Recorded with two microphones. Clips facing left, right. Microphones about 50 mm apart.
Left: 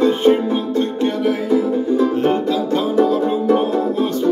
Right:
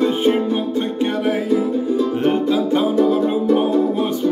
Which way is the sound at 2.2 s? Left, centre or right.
Centre.